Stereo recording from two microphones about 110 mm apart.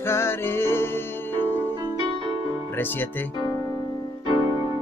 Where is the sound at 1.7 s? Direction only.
45° right (ahead or behind).